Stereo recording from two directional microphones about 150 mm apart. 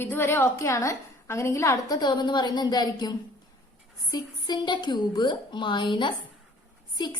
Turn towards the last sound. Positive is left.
turn(degrees=30)  # may be behind; listen again after turning